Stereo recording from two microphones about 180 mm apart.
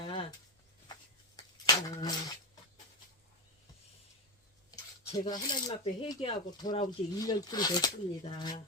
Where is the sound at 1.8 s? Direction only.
20° left (ahead or behind).